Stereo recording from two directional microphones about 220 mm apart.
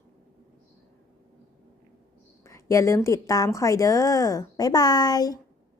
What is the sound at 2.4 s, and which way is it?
A woman's voice, 15° left (ahead or behind).